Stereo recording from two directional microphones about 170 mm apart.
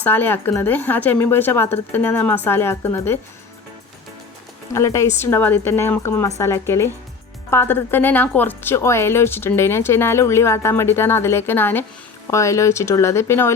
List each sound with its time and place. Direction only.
0.0 s a woman's voice: 10° left (ahead or behind)
4.7 s a woman's voice: 15° left (ahead or behind)